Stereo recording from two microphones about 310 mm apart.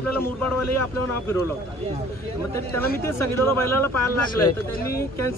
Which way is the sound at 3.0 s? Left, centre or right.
Centre.